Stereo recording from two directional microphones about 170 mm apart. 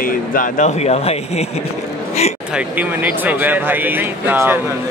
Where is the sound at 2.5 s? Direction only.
10° right (ahead or behind).